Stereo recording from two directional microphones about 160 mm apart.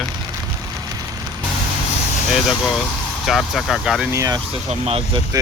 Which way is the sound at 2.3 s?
Centre (ahead or behind).